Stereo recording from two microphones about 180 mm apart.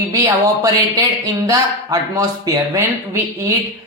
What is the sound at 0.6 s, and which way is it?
Speech, 20° right (ahead or behind).